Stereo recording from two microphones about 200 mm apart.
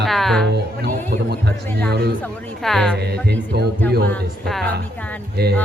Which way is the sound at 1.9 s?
55° right (ahead or behind).